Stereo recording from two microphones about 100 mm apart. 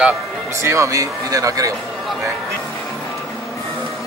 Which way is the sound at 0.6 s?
30° right (ahead or behind).